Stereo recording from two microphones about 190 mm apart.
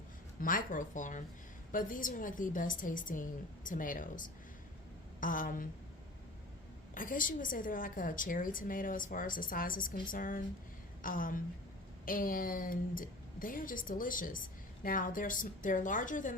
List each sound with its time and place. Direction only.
0.3 s a woman's voice: 45° left (ahead or behind)
6.9 s a woman's voice: 45° left (ahead or behind)